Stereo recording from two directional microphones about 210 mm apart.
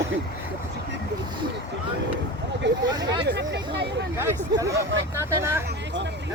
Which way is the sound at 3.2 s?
55° right (ahead or behind).